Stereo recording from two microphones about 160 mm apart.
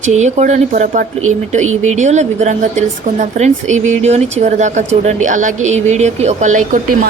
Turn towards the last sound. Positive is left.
turn(degrees=-50)  # may be behind; listen again after turning